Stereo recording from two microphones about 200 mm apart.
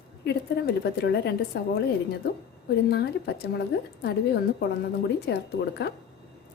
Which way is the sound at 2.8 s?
55° left (ahead or behind).